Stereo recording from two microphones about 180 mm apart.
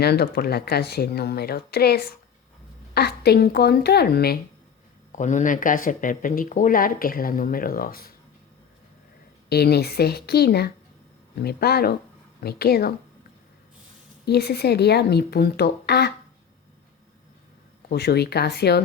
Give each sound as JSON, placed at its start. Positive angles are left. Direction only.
{"t": 0.0, "sound": "speech", "side_deg": 60}
{"t": 5.1, "sound": "speech", "side_deg": 45}
{"t": 9.5, "sound": "speech", "side_deg": 60}
{"t": 14.3, "sound": "speech", "side_deg": 65}
{"t": 17.8, "sound": "speech", "side_deg": 65}